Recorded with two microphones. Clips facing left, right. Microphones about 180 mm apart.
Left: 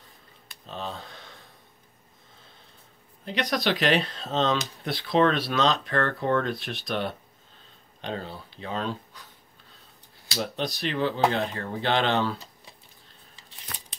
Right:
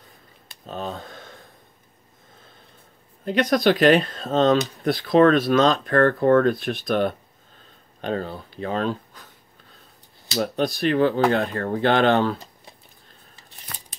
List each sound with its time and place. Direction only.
0.7 s speech: 50° right (ahead or behind)
3.3 s speech: 50° right (ahead or behind)
10.3 s speech: 50° right (ahead or behind)